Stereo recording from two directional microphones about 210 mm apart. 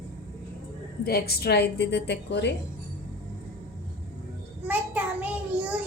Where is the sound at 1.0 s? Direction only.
50° left (ahead or behind).